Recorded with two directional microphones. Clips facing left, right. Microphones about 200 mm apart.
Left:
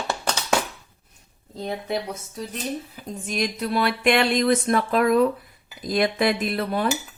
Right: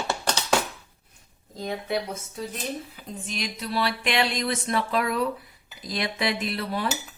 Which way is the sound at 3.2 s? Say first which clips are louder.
Left 7 dB; 50° left (ahead or behind).